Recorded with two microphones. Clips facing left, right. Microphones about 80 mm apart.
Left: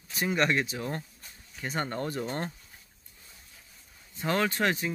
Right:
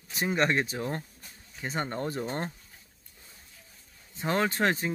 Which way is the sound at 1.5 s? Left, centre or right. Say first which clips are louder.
Even; right.